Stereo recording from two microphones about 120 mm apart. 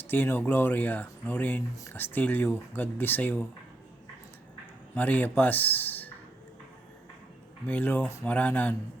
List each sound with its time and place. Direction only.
0.1 s speech: 15° left (ahead or behind)
4.9 s speech: 15° left (ahead or behind)
7.7 s speech: 15° left (ahead or behind)